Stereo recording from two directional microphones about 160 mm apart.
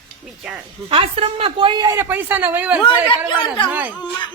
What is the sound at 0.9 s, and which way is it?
Speech, 35° right (ahead or behind).